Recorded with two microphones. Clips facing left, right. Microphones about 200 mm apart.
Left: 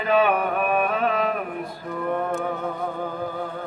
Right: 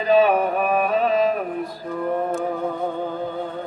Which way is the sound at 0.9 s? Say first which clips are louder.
Right 4 dB; 35° right (ahead or behind).